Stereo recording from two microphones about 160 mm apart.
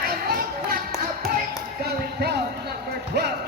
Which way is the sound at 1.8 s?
90° right.